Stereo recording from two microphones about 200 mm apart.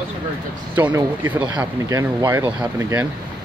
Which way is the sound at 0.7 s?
10° right (ahead or behind).